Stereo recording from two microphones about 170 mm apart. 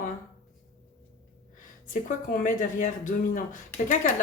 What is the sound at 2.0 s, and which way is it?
A woman's voice, 55° left (ahead or behind).